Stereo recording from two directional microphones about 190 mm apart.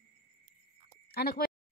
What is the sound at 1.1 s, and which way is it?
Speech, 55° left (ahead or behind).